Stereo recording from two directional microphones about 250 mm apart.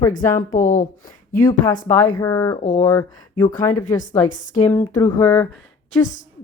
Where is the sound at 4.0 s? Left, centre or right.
Left.